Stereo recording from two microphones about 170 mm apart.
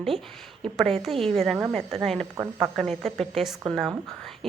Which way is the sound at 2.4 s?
10° right (ahead or behind).